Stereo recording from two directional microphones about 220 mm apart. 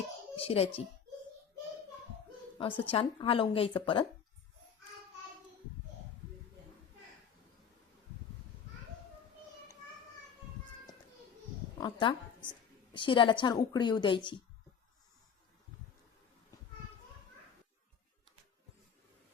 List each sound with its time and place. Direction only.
0.3 s a woman's voice: 25° left (ahead or behind)
2.6 s a woman's voice: 25° left (ahead or behind)
11.8 s a woman's voice: 20° left (ahead or behind)